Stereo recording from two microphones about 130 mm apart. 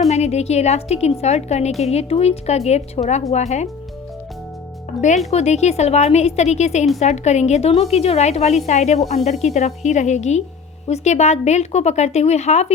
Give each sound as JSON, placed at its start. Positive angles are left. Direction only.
{"t": 0.1, "sound": "a woman's voice", "side_deg": 55}
{"t": 4.9, "sound": "a woman's voice", "side_deg": 65}